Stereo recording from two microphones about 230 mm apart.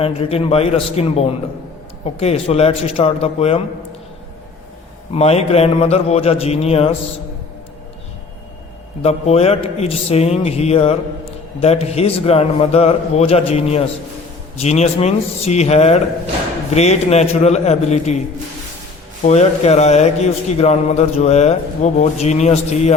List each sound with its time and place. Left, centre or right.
0.0 s a man's voice: left
5.1 s a man's voice: left
9.0 s a man's voice: left
19.2 s a man's voice: left